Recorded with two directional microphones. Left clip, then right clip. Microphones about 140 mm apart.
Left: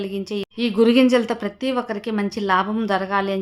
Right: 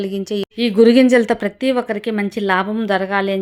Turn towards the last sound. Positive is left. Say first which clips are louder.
# right 3 dB
turn(degrees=-20)  # may be behind; listen again after turning